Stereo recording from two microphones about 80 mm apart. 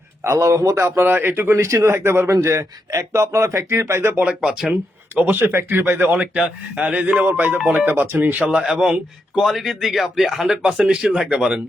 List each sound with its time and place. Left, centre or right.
0.3 s a man's voice: right
4.3 s speech: centre
5.1 s a man's voice: right